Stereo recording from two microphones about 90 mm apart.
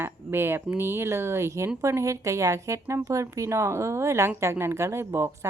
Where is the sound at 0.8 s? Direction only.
30° right (ahead or behind).